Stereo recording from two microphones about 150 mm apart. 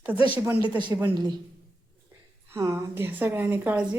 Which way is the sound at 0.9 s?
20° right (ahead or behind).